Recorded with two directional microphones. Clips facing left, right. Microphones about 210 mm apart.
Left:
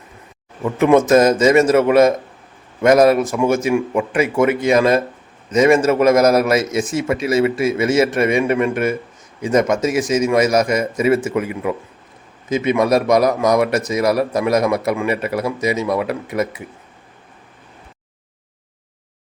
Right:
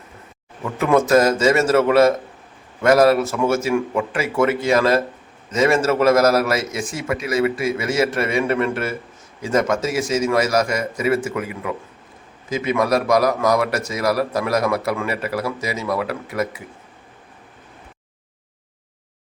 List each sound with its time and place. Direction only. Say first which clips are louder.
0.6 s speech: left 4 dB; 20° left (ahead or behind)